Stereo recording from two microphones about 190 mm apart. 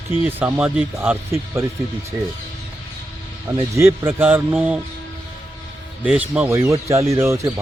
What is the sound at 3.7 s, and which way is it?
Speech, 15° right (ahead or behind).